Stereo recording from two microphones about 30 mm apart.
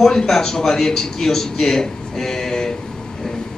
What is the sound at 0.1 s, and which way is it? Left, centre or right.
A man's voice, centre.